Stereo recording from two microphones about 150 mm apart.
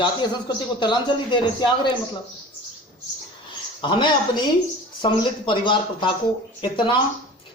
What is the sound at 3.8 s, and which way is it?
Speech, 30° left (ahead or behind).